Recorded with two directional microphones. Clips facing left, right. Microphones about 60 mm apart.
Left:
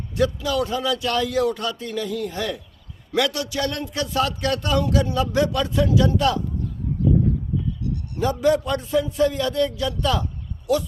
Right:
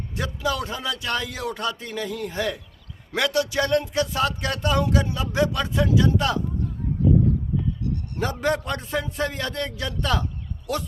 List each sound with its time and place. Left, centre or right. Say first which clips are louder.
0.2 s speech: left 5 dB; right
8.1 s a man's voice: left 5 dB; right